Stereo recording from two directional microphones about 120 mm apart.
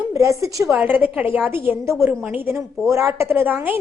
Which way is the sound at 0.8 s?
15° right (ahead or behind).